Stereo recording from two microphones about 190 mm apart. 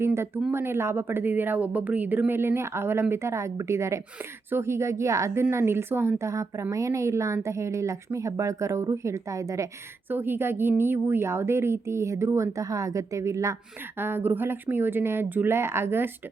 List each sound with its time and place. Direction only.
0.0 s a woman's voice: 15° right (ahead or behind)